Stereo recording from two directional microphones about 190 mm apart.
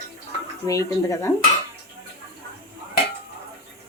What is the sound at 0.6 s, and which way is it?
Speech, 15° left (ahead or behind).